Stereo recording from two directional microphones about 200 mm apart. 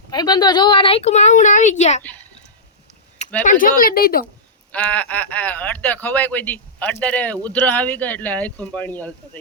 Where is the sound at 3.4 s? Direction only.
40° left (ahead or behind).